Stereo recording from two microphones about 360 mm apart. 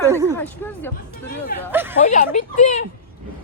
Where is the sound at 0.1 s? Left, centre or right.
Centre.